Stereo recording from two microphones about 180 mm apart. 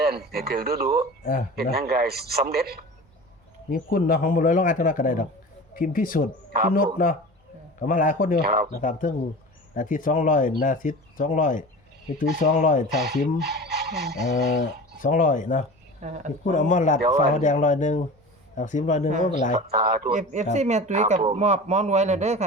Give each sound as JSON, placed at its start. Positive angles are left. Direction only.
{"t": 0.0, "sound": "a man's voice", "side_deg": -60}
{"t": 1.2, "sound": "speech", "side_deg": 50}
{"t": 1.5, "sound": "a man's voice", "side_deg": -60}
{"t": 3.7, "sound": "speech", "side_deg": 50}
{"t": 8.4, "sound": "a man's voice", "side_deg": -55}
{"t": 8.7, "sound": "speech", "side_deg": 50}
{"t": 13.4, "sound": "speech", "side_deg": -60}
{"t": 14.6, "sound": "speech", "side_deg": 50}
{"t": 16.0, "sound": "speech", "side_deg": -45}
{"t": 16.4, "sound": "speech", "side_deg": 45}
{"t": 19.7, "sound": "a man's voice", "side_deg": -55}
{"t": 20.1, "sound": "a man's voice", "side_deg": -40}